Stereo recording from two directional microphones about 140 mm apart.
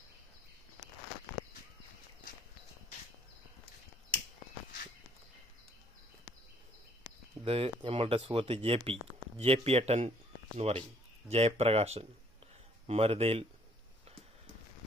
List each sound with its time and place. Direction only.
7.4 s speech: 45° right (ahead or behind)